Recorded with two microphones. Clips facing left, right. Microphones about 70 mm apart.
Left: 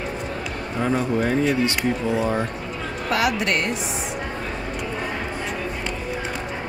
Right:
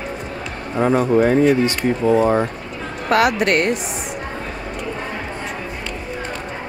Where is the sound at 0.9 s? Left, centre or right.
Right.